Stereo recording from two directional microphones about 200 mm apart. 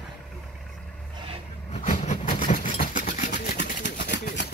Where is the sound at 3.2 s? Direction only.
55° left (ahead or behind).